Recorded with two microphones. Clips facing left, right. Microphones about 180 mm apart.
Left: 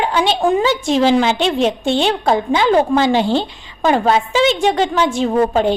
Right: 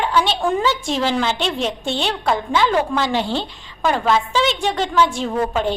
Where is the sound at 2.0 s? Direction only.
40° left (ahead or behind).